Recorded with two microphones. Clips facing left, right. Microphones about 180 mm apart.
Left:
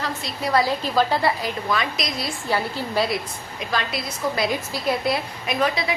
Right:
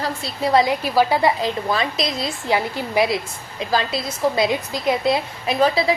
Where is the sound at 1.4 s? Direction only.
25° right (ahead or behind).